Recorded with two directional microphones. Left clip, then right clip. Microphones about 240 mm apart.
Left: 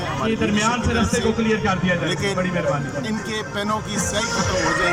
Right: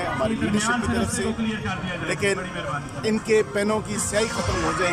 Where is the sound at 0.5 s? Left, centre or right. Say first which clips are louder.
Left 3 dB; left.